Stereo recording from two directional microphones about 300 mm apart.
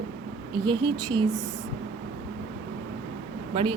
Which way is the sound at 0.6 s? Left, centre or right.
Centre.